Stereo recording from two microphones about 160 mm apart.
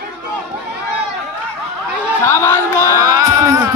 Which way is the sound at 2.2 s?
15° left (ahead or behind).